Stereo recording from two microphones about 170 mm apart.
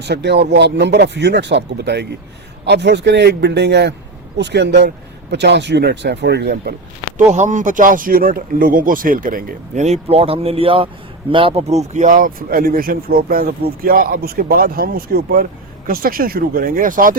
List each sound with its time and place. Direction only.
0.0 s speech: 80° right
7.3 s speech: 45° right (ahead or behind)